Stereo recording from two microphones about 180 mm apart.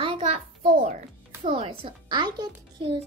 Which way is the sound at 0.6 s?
45° right (ahead or behind).